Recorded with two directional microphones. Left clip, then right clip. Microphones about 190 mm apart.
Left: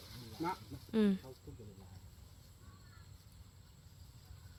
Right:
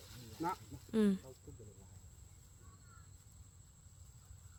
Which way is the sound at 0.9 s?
20° right (ahead or behind).